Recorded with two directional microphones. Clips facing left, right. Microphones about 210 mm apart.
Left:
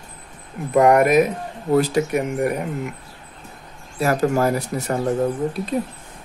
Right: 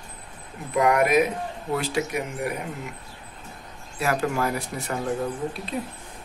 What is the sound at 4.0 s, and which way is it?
Speech, 40° left (ahead or behind).